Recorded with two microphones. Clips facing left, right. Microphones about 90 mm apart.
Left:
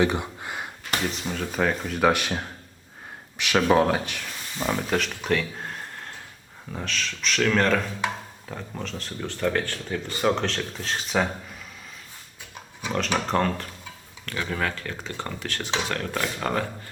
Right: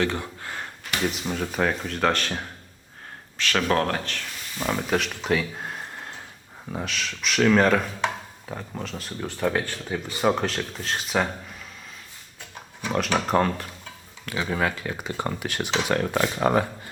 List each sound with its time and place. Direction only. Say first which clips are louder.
0.0 s a sound: left 3 dB; 15° left (ahead or behind)
1.0 s speech: right 2 dB; 5° right (ahead or behind); by 4.6 s 10° left (ahead or behind)
4.6 s speech: even; centre (ahead or behind)
13.1 s speech: right 2 dB; 5° right (ahead or behind)